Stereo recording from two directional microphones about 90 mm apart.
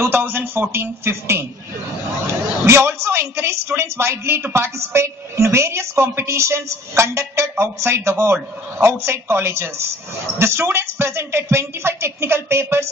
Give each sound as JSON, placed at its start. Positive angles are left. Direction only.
{"t": 0.0, "sound": "a woman's voice", "side_deg": -25}
{"t": 2.6, "sound": "a woman's voice", "side_deg": -30}